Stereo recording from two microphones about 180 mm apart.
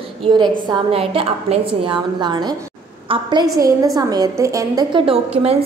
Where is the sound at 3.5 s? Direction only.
20° right (ahead or behind).